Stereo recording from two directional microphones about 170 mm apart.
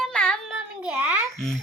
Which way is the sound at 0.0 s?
5° left (ahead or behind).